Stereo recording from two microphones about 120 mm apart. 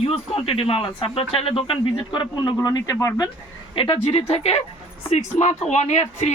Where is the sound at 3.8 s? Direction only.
55° left (ahead or behind).